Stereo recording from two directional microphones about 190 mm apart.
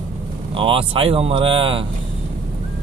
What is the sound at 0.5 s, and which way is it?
Speech, 30° right (ahead or behind).